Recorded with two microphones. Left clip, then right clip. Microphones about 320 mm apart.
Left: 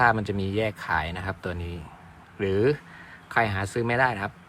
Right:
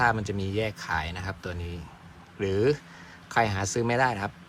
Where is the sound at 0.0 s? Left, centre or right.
Centre.